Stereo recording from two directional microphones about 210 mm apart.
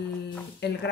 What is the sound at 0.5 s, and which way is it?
Speech, 55° left (ahead or behind).